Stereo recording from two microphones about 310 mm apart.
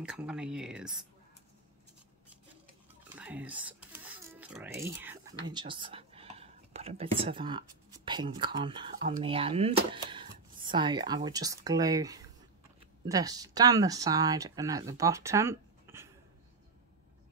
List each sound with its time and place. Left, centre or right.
0.0 s speech: centre
3.2 s whispering: centre
9.1 s speech: centre